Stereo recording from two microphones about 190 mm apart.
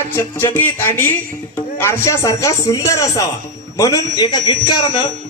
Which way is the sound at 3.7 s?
15° left (ahead or behind).